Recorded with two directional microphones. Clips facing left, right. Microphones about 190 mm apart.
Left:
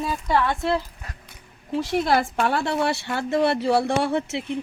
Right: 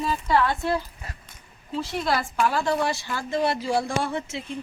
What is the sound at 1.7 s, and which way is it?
A woman's voice, 65° left (ahead or behind).